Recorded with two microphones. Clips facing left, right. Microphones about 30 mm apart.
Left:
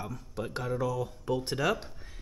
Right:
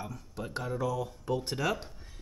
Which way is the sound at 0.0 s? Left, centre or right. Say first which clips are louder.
Left 3 dB; centre.